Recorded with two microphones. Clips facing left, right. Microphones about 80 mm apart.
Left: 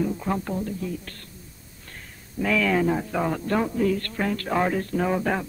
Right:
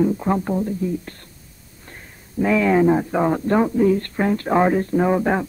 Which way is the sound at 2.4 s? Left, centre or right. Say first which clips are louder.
Right 6 dB; right.